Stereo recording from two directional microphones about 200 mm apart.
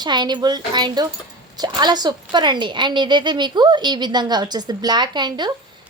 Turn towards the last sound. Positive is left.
turn(degrees=-20)  # may be behind; listen again after turning